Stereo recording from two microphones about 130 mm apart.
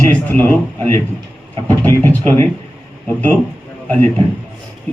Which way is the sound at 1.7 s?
15° left (ahead or behind).